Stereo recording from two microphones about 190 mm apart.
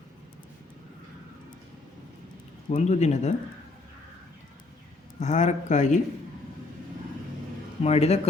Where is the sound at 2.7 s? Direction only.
35° left (ahead or behind).